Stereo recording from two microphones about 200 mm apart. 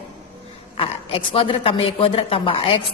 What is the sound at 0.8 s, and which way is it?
A woman's voice, 25° left (ahead or behind).